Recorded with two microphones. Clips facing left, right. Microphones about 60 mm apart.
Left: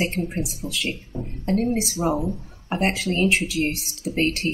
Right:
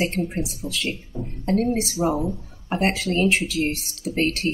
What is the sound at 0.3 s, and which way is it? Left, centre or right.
Speech, centre.